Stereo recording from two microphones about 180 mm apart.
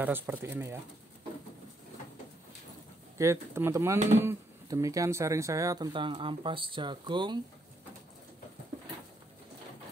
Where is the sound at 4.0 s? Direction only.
40° right (ahead or behind).